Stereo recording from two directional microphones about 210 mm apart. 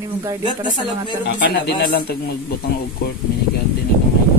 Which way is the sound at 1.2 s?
55° left (ahead or behind).